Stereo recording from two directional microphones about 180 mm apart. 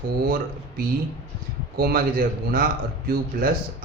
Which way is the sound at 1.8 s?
55° right (ahead or behind).